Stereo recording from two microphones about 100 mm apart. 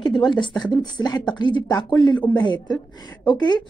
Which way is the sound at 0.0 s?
50° left (ahead or behind).